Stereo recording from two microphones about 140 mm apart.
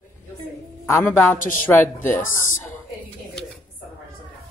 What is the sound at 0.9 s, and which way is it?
A man's voice, 15° left (ahead or behind).